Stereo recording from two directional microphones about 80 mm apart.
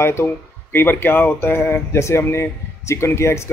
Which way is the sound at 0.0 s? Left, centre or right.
Left.